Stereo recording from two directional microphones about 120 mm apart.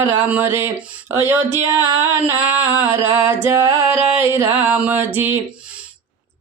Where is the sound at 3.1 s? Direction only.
20° right (ahead or behind).